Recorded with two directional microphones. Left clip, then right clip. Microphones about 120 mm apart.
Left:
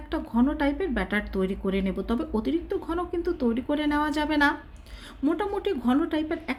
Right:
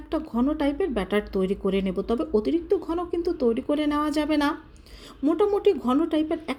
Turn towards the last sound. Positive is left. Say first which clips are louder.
# right 3 dB
turn(degrees=-25)  # may be behind; listen again after turning